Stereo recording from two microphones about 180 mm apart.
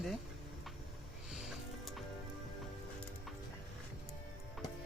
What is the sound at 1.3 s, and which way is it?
Music, centre (ahead or behind).